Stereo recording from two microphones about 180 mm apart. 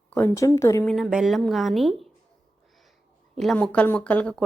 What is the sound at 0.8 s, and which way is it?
Speech, centre (ahead or behind).